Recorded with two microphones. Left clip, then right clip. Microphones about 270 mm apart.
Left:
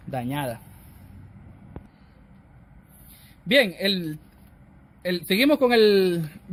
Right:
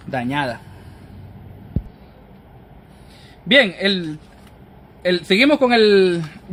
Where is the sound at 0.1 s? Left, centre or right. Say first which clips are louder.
Right 7 dB; left.